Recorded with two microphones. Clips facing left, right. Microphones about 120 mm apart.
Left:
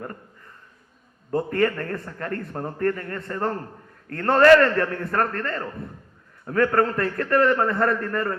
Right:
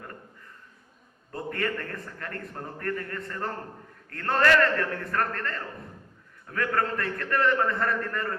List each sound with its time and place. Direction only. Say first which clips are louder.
1.3 s a man's voice: left 9 dB; 35° left (ahead or behind)
6.4 s a man's voice: left 8 dB; 50° left (ahead or behind); by 8.2 s 35° left (ahead or behind)